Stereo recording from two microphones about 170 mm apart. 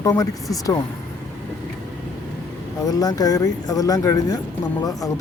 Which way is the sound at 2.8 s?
20° left (ahead or behind).